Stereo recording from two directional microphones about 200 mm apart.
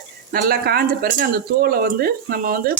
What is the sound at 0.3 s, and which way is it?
Speech, 50° right (ahead or behind).